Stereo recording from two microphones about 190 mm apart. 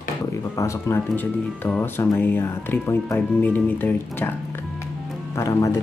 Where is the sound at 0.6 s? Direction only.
15° left (ahead or behind).